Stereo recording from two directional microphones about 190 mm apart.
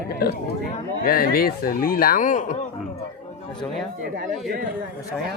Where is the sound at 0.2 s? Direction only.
55° left (ahead or behind); by 2.6 s 40° left (ahead or behind).